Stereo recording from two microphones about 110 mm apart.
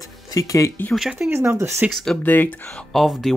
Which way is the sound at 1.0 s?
5° right (ahead or behind).